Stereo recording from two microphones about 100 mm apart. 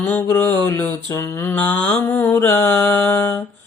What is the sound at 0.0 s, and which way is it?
Mantra, 20° left (ahead or behind).